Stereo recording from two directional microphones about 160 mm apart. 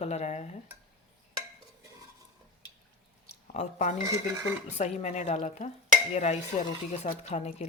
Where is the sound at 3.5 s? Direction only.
45° left (ahead or behind).